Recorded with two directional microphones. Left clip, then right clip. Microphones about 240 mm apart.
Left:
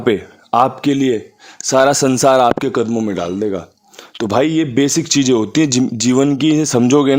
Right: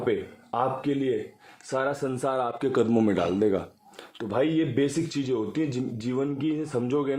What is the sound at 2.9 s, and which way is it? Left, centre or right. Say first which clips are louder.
Speech: left 5 dB; centre.